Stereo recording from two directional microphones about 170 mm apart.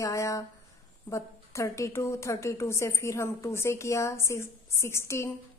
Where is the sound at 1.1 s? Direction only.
15° left (ahead or behind).